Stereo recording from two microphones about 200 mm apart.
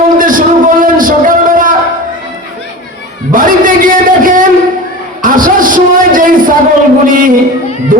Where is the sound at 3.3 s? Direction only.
45° right (ahead or behind).